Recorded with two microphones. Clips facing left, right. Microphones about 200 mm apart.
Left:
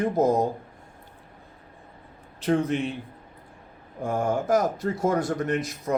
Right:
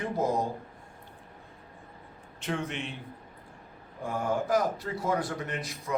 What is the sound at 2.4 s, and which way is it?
Speech, 40° left (ahead or behind).